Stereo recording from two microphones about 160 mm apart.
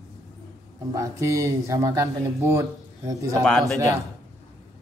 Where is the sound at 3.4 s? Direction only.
5° left (ahead or behind).